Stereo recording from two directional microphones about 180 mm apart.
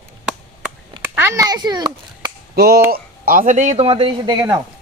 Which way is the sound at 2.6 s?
60° right (ahead or behind).